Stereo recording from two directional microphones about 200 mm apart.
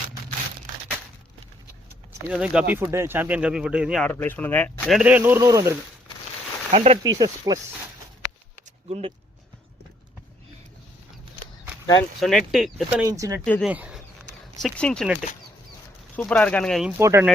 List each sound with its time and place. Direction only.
2.2 s speech: 5° right (ahead or behind)
4.0 s speech: 10° left (ahead or behind); by 5.7 s 15° right (ahead or behind)
6.7 s speech: 30° right (ahead or behind)
7.0 s speech: 20° right (ahead or behind)
8.9 s speech: 30° right (ahead or behind)
12.2 s speech: centre (ahead or behind)
13.1 s speech: 15° right (ahead or behind)
13.4 s speech: centre (ahead or behind)
17.0 s speech: 15° right (ahead or behind)